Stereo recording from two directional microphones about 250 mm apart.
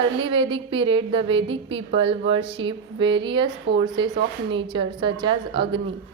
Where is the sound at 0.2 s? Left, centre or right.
Right.